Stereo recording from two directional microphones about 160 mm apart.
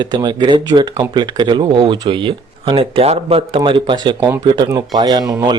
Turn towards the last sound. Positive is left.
turn(degrees=-25)  # may be behind; listen again after turning